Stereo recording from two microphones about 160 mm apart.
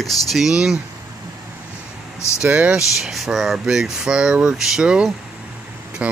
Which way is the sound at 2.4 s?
5° right (ahead or behind).